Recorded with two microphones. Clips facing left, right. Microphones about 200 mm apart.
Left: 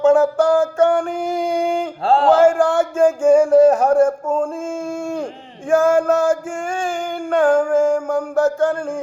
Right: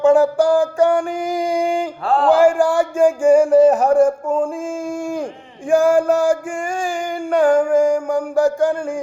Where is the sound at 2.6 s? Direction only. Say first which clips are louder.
Even; 10° right (ahead or behind).